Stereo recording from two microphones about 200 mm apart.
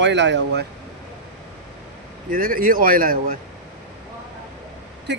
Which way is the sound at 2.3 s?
45° right (ahead or behind).